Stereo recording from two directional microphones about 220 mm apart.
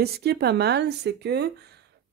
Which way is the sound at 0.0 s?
45° right (ahead or behind).